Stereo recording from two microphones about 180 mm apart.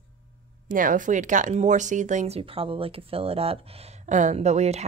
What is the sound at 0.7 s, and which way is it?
Speech, 50° right (ahead or behind).